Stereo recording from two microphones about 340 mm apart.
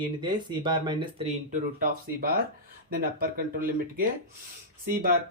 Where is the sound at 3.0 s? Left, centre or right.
Right.